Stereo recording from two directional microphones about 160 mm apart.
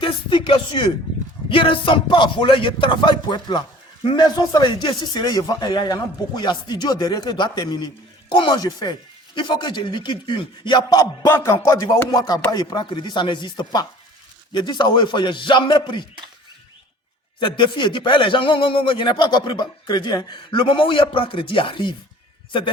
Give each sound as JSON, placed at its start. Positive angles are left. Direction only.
{"t": 0.0, "sound": "speech", "side_deg": 30}
{"t": 17.4, "sound": "speech", "side_deg": 30}